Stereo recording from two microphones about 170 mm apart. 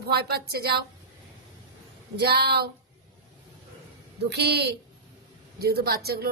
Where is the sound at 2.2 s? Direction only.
70° right (ahead or behind).